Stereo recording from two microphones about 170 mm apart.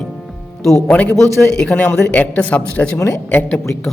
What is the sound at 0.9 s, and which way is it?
Speech, 5° left (ahead or behind).